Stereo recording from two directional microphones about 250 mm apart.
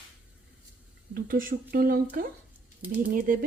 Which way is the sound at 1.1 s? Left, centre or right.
Right.